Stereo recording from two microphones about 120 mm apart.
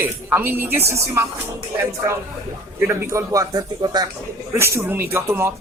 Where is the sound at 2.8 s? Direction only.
20° right (ahead or behind).